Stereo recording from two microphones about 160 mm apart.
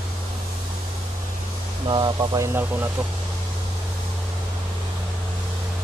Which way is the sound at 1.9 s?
25° right (ahead or behind).